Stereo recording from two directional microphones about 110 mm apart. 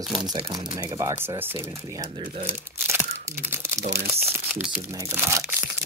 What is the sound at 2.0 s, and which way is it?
Speech, 75° right (ahead or behind).